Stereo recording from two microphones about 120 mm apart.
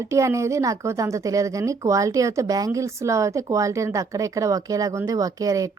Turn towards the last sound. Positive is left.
turn(degrees=-30)  # may be behind; listen again after turning